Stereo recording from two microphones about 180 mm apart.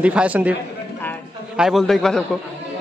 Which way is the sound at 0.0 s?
5° right (ahead or behind).